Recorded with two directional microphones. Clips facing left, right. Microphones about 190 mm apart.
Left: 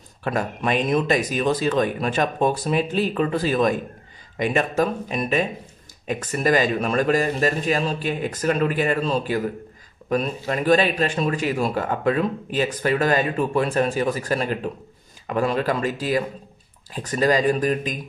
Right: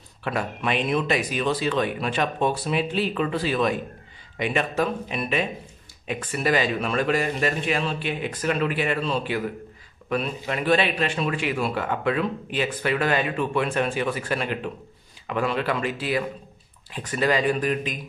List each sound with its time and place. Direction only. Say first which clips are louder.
0.2 s speech: left 3 dB; 45° left (ahead or behind)